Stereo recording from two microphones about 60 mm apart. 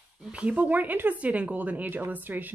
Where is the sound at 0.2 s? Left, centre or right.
Right.